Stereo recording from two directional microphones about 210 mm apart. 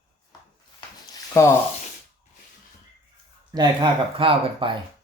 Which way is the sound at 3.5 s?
20° right (ahead or behind).